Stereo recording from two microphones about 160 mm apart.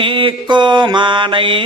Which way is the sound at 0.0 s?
30° right (ahead or behind).